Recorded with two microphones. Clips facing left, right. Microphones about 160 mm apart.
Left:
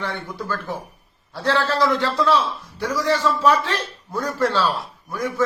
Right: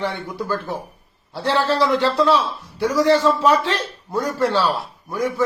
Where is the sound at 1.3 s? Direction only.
15° right (ahead or behind).